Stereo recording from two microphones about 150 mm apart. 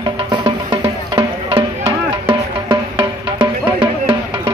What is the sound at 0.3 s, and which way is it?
Music, 30° right (ahead or behind).